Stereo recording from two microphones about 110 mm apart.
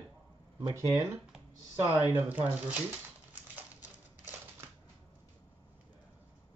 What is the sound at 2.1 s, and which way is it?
Speech, 15° right (ahead or behind).